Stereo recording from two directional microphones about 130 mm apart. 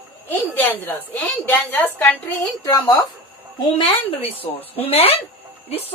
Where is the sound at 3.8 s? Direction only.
45° left (ahead or behind).